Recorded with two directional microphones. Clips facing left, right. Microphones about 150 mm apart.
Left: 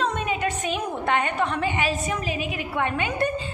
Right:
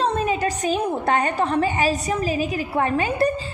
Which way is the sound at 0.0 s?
35° right (ahead or behind).